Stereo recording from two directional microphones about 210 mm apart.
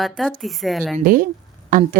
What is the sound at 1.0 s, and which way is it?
Speech, 40° right (ahead or behind).